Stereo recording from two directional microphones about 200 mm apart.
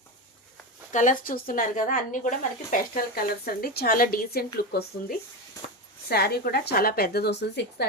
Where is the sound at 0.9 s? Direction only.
40° left (ahead or behind).